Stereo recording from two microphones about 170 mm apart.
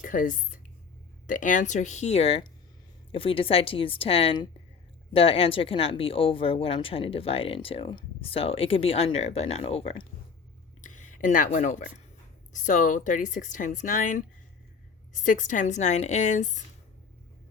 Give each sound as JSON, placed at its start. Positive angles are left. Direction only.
{"t": 0.0, "sound": "speech", "side_deg": 50}
{"t": 10.8, "sound": "a sound", "side_deg": 45}
{"t": 12.5, "sound": "speech", "side_deg": 50}